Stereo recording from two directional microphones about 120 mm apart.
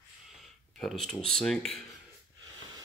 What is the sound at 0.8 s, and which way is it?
Speech, 5° left (ahead or behind).